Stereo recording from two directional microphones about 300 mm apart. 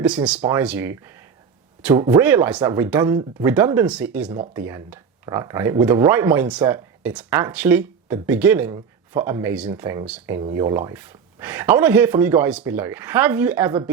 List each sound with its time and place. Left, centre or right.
0.0 s speech: centre